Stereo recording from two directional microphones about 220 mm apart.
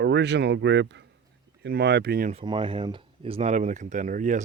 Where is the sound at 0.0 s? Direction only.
50° right (ahead or behind).